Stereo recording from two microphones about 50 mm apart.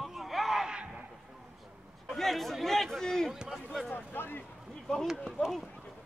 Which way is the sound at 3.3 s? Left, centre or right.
Centre.